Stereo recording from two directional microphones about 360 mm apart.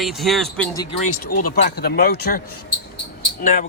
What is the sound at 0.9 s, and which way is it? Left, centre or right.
Speech, left.